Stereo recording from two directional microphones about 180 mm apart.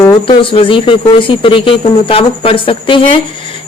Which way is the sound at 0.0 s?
20° left (ahead or behind).